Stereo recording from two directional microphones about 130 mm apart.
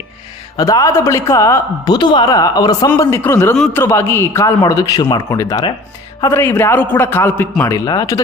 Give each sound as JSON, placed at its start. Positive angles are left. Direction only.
{"t": 0.5, "sound": "a woman's voice", "side_deg": 25}